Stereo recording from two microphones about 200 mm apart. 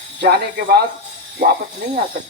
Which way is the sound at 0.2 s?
50° right (ahead or behind).